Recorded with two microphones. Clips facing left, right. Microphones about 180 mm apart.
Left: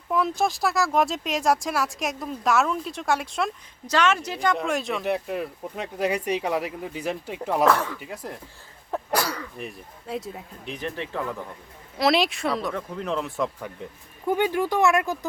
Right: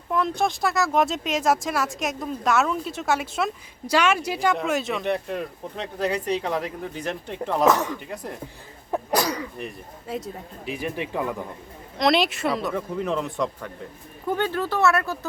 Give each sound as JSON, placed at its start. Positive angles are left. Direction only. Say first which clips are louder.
{"t": 0.1, "sound": "speech", "louder": "even", "side_deg": 5}
{"t": 7.6, "sound": "speech", "louder": "right 1 dB", "side_deg": -15}
{"t": 7.9, "sound": "speech", "louder": "right 2 dB", "side_deg": 0}
{"t": 8.9, "sound": "cough", "louder": "right 3 dB", "side_deg": -15}
{"t": 9.6, "sound": "speech", "louder": "right 2 dB", "side_deg": 0}
{"t": 10.8, "sound": "speech", "louder": "right 2 dB", "side_deg": -10}
{"t": 11.9, "sound": "speech", "louder": "right 1 dB", "side_deg": 0}
{"t": 14.3, "sound": "speech", "louder": "left 2 dB", "side_deg": 15}